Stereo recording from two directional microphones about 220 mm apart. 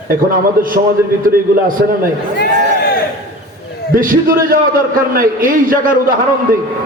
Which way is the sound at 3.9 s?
40° right (ahead or behind).